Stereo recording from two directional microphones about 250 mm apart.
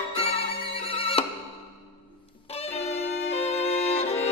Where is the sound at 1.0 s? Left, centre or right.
Left.